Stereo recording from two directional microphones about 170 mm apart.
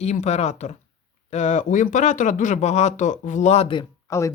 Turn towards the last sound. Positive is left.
turn(degrees=15)  # may be behind; listen again after turning